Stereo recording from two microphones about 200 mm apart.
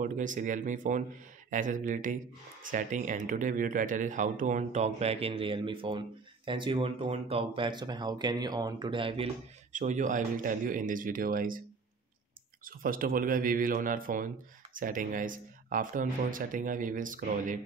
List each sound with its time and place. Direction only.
0.0 s speech: 40° right (ahead or behind)
12.6 s a man's voice: 45° right (ahead or behind)